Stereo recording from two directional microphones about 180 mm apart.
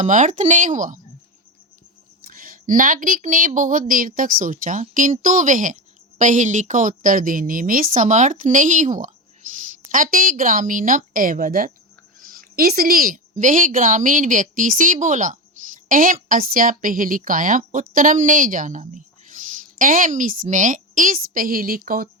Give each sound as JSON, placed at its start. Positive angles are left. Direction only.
{"t": 0.0, "sound": "a woman's voice", "side_deg": -45}
{"t": 2.2, "sound": "a woman's voice", "side_deg": -55}